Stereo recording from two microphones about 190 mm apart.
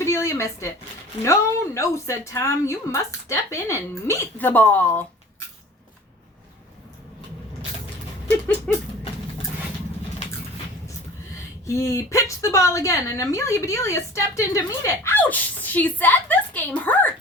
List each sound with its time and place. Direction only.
0.0 s a sound: 15° left (ahead or behind)
1.2 s a woman's voice: 15° left (ahead or behind)
11.6 s a woman's voice: 15° left (ahead or behind)